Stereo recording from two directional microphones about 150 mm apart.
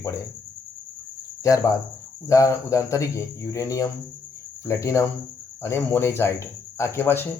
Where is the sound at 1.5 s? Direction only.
20° left (ahead or behind).